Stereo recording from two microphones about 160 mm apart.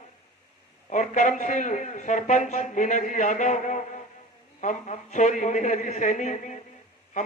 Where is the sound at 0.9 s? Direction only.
50° left (ahead or behind).